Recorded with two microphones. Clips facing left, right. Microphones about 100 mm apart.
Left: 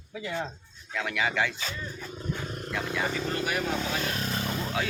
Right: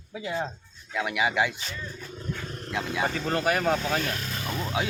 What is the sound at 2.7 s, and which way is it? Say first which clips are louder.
Speech: right 3 dB; 20° right (ahead or behind).